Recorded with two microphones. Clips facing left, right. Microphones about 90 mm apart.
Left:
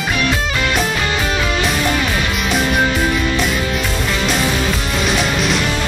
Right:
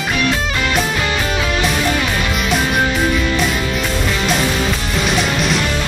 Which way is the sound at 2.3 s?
Centre (ahead or behind).